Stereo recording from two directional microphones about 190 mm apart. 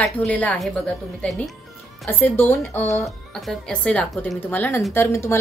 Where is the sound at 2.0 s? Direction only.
10° left (ahead or behind).